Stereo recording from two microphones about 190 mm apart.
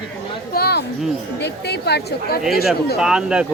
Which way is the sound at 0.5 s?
55° left (ahead or behind).